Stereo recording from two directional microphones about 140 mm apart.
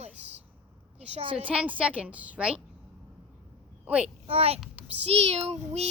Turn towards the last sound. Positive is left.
turn(degrees=-50)  # may be behind; listen again after turning